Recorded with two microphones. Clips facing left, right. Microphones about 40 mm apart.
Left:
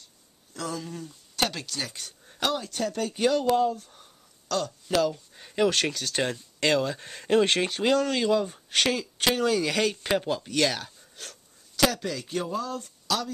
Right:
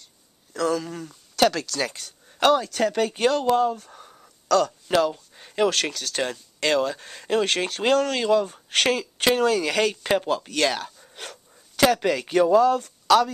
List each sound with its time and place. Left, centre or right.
0.6 s speech: right
2.0 s a sound: centre
2.5 s speech: right
3.1 s speech: right
3.4 s speech: centre
3.7 s speech: right
4.5 s speech: right
5.0 s speech: centre
7.8 s speech: centre
11.1 s a sound: right
12.0 s speech: right